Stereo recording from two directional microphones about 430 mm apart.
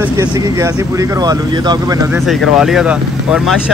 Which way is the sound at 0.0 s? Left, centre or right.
Centre.